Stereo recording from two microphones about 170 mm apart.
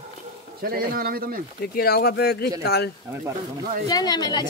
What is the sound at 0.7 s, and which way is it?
Speech, 60° right (ahead or behind).